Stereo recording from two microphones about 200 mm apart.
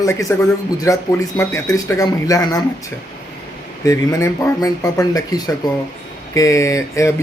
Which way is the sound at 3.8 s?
15° left (ahead or behind).